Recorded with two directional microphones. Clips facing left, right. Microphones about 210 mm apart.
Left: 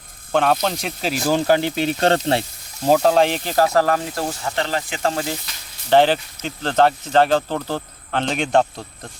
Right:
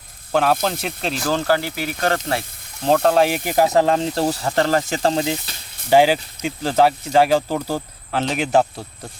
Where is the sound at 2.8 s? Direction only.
5° left (ahead or behind); by 5.2 s 30° right (ahead or behind).